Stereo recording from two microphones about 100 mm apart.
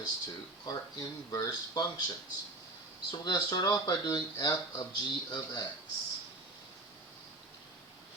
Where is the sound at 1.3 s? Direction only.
40° left (ahead or behind).